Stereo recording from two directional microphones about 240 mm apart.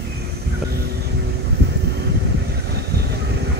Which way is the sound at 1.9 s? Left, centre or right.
Right.